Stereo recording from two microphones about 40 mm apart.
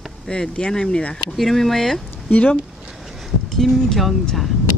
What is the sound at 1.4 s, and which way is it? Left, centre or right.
Speech, centre.